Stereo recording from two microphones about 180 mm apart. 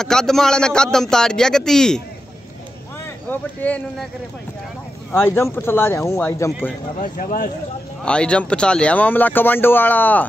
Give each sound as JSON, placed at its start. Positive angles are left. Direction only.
{"t": 0.0, "sound": "speech", "side_deg": 5}
{"t": 3.3, "sound": "speech", "side_deg": 10}
{"t": 5.1, "sound": "speech", "side_deg": 15}
{"t": 7.0, "sound": "speech", "side_deg": 50}
{"t": 8.0, "sound": "speech", "side_deg": 5}